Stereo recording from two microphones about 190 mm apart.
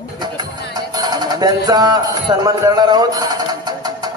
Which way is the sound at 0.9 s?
20° right (ahead or behind).